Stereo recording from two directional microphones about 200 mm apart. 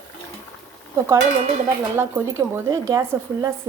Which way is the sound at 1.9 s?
10° right (ahead or behind).